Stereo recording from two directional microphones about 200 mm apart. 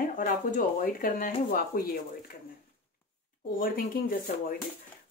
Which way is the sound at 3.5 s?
45° left (ahead or behind).